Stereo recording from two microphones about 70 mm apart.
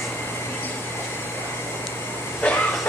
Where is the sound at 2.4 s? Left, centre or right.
Left.